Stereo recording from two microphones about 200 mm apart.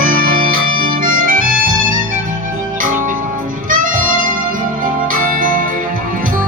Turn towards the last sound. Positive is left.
turn(degrees=-45)  # may be behind; listen again after turning